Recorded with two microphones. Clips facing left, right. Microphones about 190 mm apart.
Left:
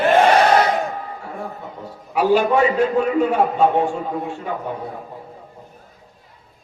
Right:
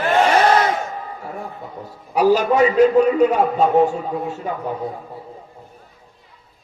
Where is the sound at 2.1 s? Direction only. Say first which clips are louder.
Right 1 dB; 40° right (ahead or behind).